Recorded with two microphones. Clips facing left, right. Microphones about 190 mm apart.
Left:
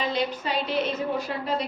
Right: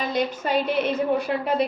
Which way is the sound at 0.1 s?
50° right (ahead or behind).